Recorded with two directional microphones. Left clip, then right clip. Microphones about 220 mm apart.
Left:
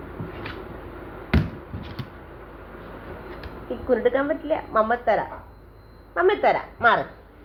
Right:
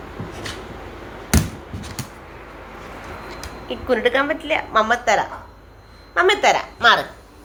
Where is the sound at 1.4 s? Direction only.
30° right (ahead or behind).